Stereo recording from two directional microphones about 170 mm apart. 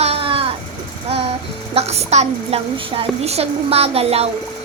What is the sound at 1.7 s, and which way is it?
A woman's voice, 40° right (ahead or behind).